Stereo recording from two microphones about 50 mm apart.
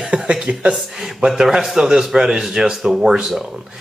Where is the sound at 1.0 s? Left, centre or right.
Centre.